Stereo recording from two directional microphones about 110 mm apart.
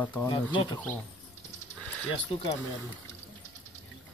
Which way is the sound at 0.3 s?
50° left (ahead or behind).